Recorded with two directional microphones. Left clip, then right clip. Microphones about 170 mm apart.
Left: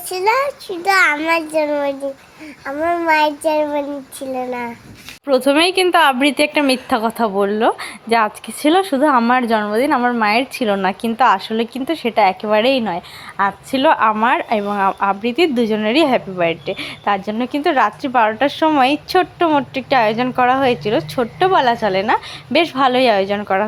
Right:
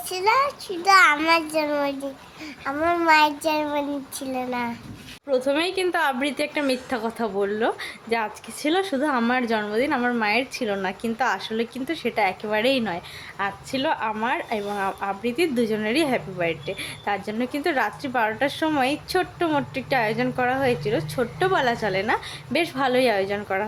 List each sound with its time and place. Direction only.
0.1 s a child's voice: 20° left (ahead or behind)
5.5 s a woman's voice: 30° left (ahead or behind); by 13.0 s 15° left (ahead or behind)
13.3 s a woman's voice: 25° left (ahead or behind)